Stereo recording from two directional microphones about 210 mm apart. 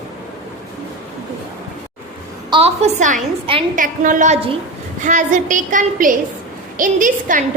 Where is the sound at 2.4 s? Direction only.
25° right (ahead or behind).